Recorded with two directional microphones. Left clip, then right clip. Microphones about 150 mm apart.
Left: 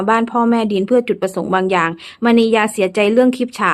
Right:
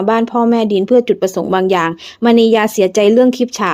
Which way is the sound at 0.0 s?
25° right (ahead or behind).